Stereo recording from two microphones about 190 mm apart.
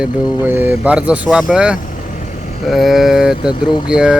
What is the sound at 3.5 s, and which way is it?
Speech, 25° left (ahead or behind).